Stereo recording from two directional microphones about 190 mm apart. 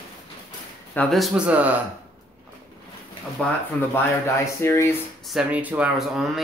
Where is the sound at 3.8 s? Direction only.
10° left (ahead or behind).